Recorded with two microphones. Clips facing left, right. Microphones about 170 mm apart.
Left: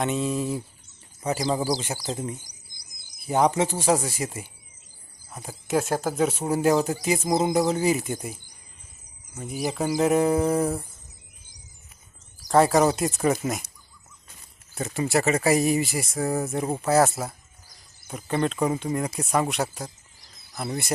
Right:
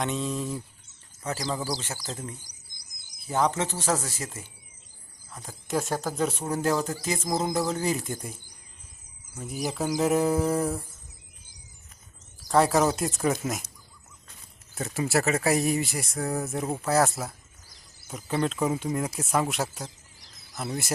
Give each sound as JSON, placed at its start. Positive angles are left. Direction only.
{"t": 0.0, "sound": "speech", "side_deg": 5}
{"t": 2.7, "sound": "bird", "side_deg": -20}
{"t": 3.2, "sound": "speech", "side_deg": 15}
{"t": 12.5, "sound": "speech", "side_deg": 0}
{"t": 14.8, "sound": "speech", "side_deg": 0}